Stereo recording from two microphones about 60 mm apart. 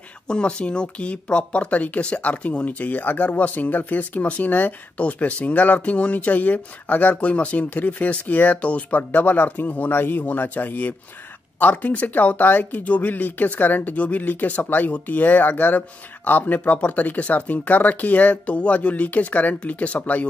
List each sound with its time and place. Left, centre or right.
0.3 s speech: centre